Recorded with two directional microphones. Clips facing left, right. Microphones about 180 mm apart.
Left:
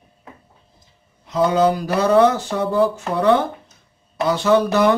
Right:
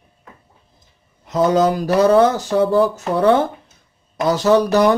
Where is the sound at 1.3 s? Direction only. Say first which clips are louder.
Right 1 dB; 45° right (ahead or behind).